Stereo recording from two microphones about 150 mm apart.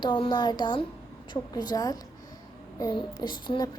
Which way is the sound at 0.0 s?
30° left (ahead or behind).